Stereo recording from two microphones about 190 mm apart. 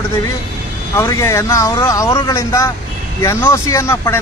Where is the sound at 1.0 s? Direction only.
15° left (ahead or behind).